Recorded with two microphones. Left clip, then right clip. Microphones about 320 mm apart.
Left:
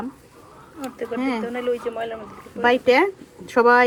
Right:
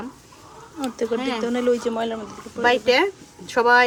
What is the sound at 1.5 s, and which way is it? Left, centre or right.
Speech, right.